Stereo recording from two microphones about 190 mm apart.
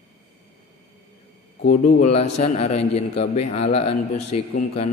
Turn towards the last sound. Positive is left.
turn(degrees=35)  # may be behind; listen again after turning